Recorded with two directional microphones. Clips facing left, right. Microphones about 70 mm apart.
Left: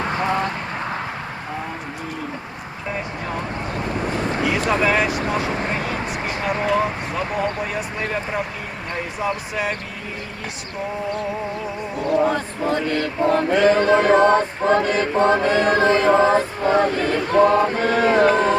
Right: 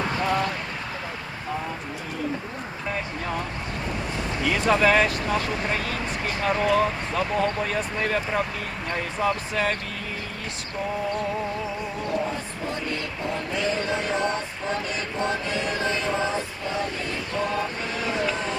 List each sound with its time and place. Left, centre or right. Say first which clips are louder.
0.2 s a sound: left 2 dB; left
4.8 s speech: left 1 dB; centre
5.5 s speech: left 3 dB; left
5.7 s vehicle: left 3 dB; centre
6.4 s speech: left 1 dB; centre
12.1 s a sound: left 11 dB; left